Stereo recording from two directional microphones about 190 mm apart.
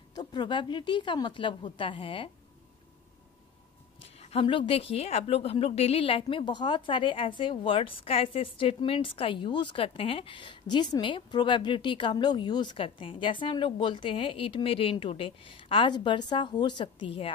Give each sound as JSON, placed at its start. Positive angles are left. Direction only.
{"t": 0.1, "sound": "a woman's voice", "side_deg": 20}
{"t": 4.2, "sound": "a woman's voice", "side_deg": 30}